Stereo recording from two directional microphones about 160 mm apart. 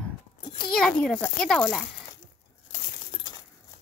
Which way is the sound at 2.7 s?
40° left (ahead or behind).